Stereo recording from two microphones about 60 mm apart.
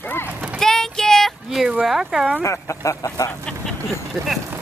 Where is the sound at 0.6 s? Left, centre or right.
Centre.